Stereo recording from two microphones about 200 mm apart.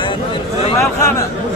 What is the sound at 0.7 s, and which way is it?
Speech, 15° left (ahead or behind).